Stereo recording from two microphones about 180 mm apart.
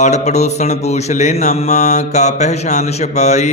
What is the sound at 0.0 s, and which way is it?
Mantra, 40° left (ahead or behind).